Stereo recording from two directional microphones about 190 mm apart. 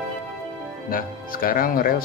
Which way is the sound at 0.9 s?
50° left (ahead or behind).